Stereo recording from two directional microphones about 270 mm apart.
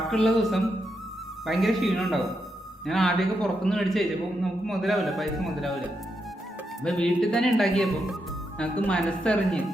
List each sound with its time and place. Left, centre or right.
0.0 s a man's voice: centre
6.8 s a man's voice: centre